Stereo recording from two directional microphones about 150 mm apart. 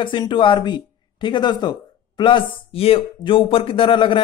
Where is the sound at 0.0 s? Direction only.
35° left (ahead or behind).